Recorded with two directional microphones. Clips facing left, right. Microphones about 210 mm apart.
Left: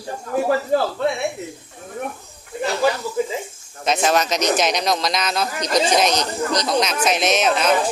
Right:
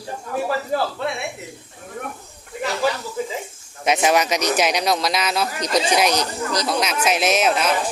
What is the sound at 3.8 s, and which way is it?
Speech, 15° right (ahead or behind).